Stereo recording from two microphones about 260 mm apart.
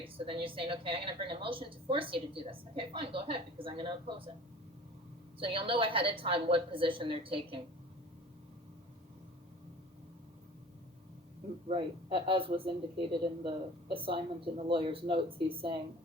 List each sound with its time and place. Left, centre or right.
0.0 s a woman's voice: centre
5.4 s a woman's voice: centre
11.7 s a woman's voice: centre